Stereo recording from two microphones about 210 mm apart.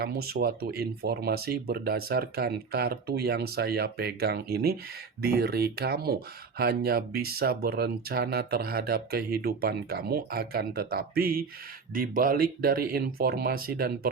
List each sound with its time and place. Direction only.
0.0 s speech: 45° right (ahead or behind)